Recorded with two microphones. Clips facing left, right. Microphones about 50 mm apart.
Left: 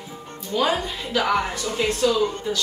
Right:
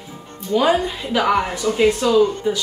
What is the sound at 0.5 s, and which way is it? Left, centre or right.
Speech, centre.